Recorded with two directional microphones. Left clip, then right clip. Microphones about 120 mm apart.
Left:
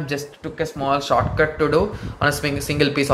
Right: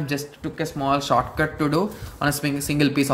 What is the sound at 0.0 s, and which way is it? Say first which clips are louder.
Speech: left 1 dB; 50° right (ahead or behind).